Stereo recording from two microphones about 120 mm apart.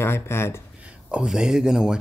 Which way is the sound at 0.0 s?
20° left (ahead or behind).